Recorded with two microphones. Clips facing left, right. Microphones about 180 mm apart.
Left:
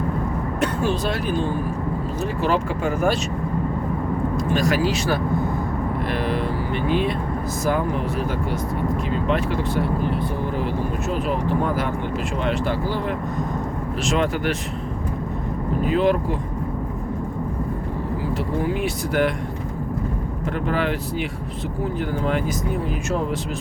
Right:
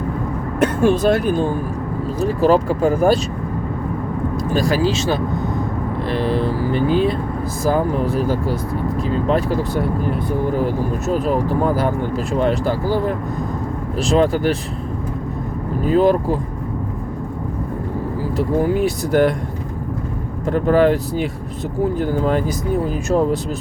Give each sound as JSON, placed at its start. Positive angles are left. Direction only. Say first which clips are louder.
{"t": 0.6, "sound": "speech", "louder": "right 8 dB", "side_deg": -50}
{"t": 4.4, "sound": "speech", "louder": "right 3 dB", "side_deg": -30}
{"t": 15.9, "sound": "speech", "louder": "right 6 dB", "side_deg": -40}
{"t": 18.3, "sound": "speech", "louder": "right 8 dB", "side_deg": -40}
{"t": 20.5, "sound": "speech", "louder": "right 9 dB", "side_deg": -40}